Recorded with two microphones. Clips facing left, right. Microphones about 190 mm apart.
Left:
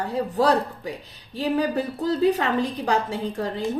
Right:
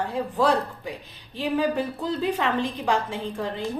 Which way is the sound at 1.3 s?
40° left (ahead or behind).